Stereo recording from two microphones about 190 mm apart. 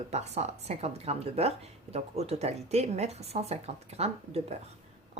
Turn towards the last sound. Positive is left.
turn(degrees=-35)  # may be behind; listen again after turning